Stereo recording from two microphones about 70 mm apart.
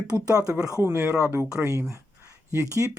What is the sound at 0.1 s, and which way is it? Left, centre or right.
Speech, left.